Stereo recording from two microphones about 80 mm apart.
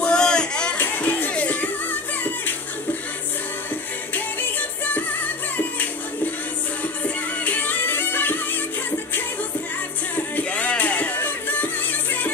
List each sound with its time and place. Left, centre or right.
0.0 s a sound: centre
0.7 s music: left
4.1 s music: left
7.4 s music: left
10.1 s music: left